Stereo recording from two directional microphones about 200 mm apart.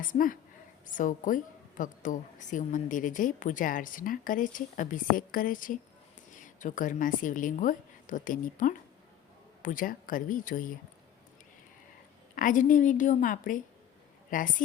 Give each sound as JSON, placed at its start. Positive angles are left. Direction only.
{"t": 0.0, "sound": "a woman's voice", "side_deg": 40}
{"t": 12.3, "sound": "a woman's voice", "side_deg": 40}